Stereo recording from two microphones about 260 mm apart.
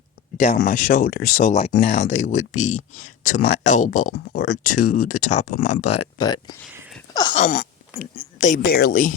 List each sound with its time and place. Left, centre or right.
0.3 s speech: left
2.7 s speech: left
3.2 s speech: left
5.0 s speech: left
5.3 s speech: left
5.8 s speech: left
6.1 s speech: centre
7.1 s wail: centre
7.4 s speech: left